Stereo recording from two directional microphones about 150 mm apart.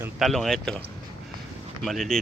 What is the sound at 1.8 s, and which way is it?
Speech, centre (ahead or behind).